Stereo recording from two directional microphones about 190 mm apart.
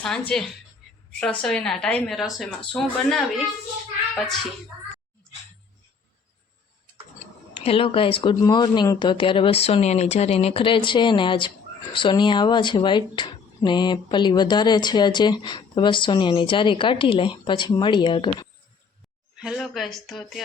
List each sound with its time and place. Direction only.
0.0 s a woman's voice: 5° left (ahead or behind)
7.5 s speech: 30° left (ahead or behind)
19.4 s a woman's voice: centre (ahead or behind)